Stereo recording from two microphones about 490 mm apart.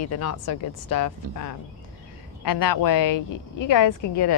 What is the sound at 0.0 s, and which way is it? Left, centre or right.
Speech, left.